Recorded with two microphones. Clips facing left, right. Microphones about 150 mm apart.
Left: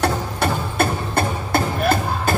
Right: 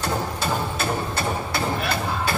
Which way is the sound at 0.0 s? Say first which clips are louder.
Left 5 dB; 60° left (ahead or behind).